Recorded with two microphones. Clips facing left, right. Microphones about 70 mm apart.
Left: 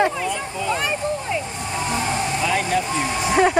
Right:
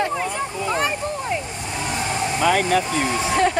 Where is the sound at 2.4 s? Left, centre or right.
Right.